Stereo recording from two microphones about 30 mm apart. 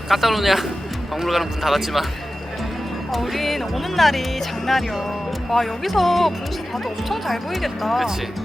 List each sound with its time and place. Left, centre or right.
0.1 s speech: centre
3.1 s speech: centre